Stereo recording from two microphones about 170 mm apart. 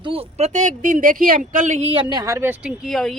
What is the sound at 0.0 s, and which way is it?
Speech, 35° right (ahead or behind).